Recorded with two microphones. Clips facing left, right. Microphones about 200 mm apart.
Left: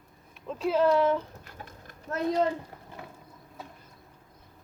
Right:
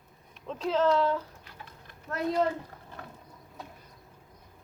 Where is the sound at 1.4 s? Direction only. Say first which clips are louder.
Left 3 dB; 45° left (ahead or behind).